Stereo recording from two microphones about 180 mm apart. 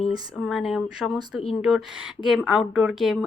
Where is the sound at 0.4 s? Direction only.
Centre (ahead or behind).